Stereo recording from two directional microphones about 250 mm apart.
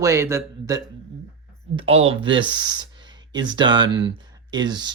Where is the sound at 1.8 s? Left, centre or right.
Right.